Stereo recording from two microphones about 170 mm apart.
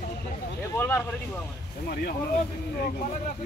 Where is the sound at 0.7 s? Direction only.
10° left (ahead or behind).